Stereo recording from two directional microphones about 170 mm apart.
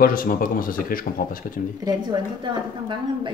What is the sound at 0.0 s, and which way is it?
Speech, 55° left (ahead or behind).